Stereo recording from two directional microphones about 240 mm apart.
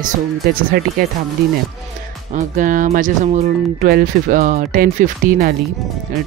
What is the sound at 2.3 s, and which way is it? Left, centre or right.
Speech, right.